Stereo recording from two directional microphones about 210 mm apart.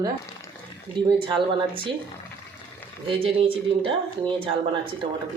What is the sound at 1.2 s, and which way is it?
Speech, 25° right (ahead or behind).